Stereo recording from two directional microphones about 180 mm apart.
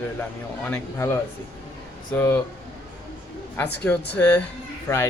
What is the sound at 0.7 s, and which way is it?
Speech, 15° left (ahead or behind).